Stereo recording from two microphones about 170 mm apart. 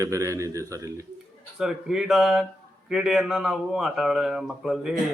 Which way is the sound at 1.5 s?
5° right (ahead or behind).